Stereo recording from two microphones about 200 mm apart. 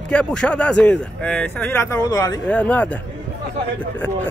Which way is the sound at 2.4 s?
5° left (ahead or behind).